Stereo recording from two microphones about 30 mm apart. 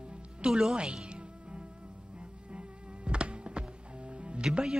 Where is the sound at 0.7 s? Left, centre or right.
Right.